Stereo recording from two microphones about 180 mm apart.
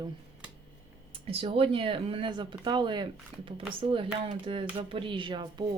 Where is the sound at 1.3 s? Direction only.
30° right (ahead or behind).